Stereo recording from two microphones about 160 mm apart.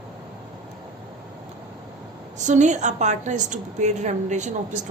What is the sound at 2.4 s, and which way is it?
A woman's voice, 50° right (ahead or behind).